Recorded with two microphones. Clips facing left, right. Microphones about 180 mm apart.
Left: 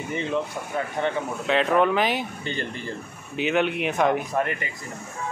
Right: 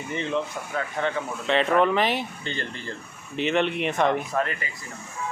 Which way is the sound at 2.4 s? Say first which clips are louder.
Left 2 dB; 15° left (ahead or behind).